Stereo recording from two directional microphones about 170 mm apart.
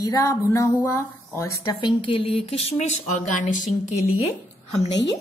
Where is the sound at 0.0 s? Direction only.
20° left (ahead or behind); by 2.7 s 35° left (ahead or behind).